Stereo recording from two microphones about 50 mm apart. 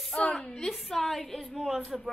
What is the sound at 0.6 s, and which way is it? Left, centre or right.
A woman's voice, centre.